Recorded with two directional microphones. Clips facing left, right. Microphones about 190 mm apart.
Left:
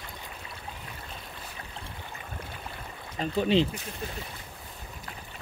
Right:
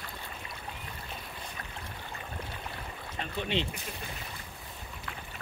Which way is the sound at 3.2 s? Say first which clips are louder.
Left 9 dB; 35° left (ahead or behind).